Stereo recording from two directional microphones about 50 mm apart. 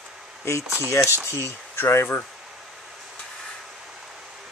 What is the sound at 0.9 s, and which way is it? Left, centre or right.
Speech, left.